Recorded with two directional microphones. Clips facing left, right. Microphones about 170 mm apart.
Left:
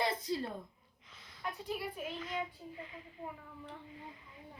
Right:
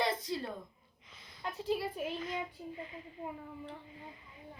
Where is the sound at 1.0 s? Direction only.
15° right (ahead or behind).